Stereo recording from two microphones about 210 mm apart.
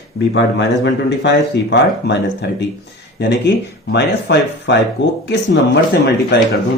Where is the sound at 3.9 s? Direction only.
55° left (ahead or behind).